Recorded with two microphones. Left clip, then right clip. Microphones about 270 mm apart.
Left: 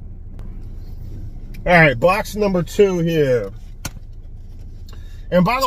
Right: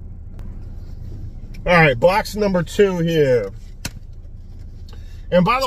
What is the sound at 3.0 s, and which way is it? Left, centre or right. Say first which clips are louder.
Speech: right 1 dB; centre.